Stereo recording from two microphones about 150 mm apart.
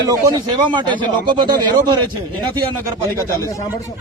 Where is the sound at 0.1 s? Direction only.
25° right (ahead or behind).